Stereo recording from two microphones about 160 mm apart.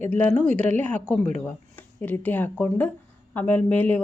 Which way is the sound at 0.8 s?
10° left (ahead or behind).